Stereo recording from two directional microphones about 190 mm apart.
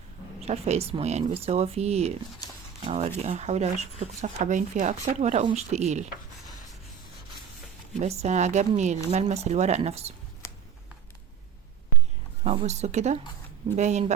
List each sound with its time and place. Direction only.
0.4 s speech: 35° right (ahead or behind)
8.0 s speech: 35° right (ahead or behind)
12.5 s speech: 35° right (ahead or behind)